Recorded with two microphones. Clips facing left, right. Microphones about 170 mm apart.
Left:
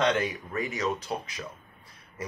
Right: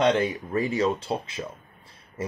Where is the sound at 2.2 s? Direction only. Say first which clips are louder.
Right 6 dB; 25° right (ahead or behind).